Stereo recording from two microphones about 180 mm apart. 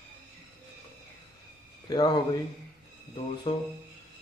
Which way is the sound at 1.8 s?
25° left (ahead or behind).